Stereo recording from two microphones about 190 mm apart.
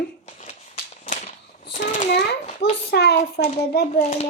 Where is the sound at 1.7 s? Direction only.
40° left (ahead or behind).